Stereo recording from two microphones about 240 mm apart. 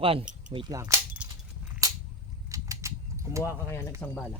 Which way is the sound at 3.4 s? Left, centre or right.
Centre.